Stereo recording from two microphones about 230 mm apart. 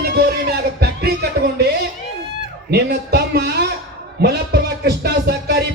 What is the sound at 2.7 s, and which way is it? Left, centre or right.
Speech, right.